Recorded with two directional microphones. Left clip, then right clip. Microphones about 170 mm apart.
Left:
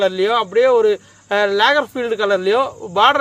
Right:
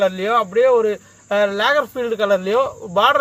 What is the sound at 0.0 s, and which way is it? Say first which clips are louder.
Speech: left 1 dB; 30° left (ahead or behind).